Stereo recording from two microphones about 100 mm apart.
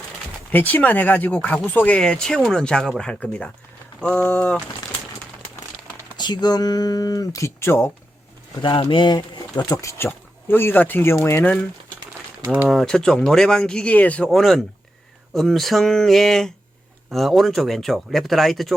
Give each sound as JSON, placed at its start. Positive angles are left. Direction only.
{"t": 0.5, "sound": "speech", "side_deg": 15}
{"t": 6.1, "sound": "speech", "side_deg": 45}
{"t": 8.8, "sound": "speech", "side_deg": 55}
{"t": 10.0, "sound": "speech", "side_deg": 20}
{"t": 12.4, "sound": "speech", "side_deg": -15}
{"t": 12.6, "sound": "speech", "side_deg": 5}
{"t": 14.3, "sound": "speech", "side_deg": 0}